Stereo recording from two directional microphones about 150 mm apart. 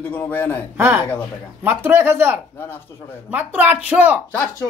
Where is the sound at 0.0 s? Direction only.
10° left (ahead or behind).